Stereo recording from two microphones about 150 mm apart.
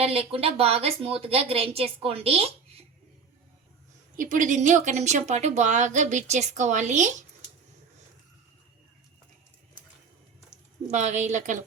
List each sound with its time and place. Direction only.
0.0 s a woman's voice: 40° right (ahead or behind)
4.2 s speech: 60° right (ahead or behind)
10.9 s speech: 50° right (ahead or behind)